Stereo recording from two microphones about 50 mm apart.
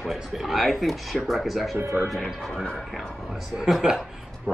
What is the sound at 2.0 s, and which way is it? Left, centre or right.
Speech, right.